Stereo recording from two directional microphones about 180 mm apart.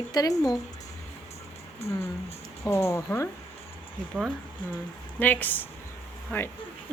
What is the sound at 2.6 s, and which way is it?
Speech, 15° left (ahead or behind).